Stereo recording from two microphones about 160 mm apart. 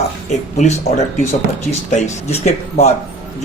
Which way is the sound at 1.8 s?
45° left (ahead or behind).